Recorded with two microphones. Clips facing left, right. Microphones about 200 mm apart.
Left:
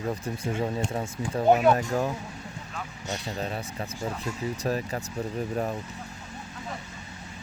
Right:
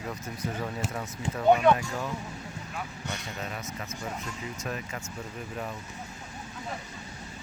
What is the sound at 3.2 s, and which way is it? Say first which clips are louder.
Speech: left 5 dB; 30° left (ahead or behind).